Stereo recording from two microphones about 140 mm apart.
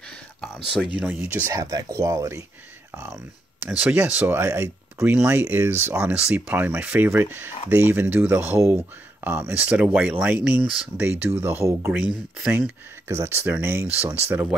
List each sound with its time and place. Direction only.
0.9 s speech: 5° right (ahead or behind)
1.5 s speech: 25° right (ahead or behind)
3.6 s speech: 10° right (ahead or behind)